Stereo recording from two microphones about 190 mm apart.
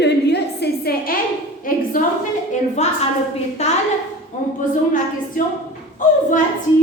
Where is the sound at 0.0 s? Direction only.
65° left (ahead or behind).